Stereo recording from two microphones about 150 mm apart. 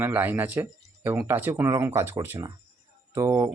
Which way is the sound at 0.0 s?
15° right (ahead or behind).